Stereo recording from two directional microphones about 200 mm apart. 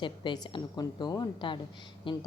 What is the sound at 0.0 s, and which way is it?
A woman's voice, 25° left (ahead or behind).